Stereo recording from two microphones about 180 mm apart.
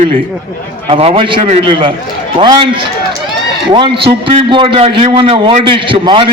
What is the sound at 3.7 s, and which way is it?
A man's voice, 30° right (ahead or behind).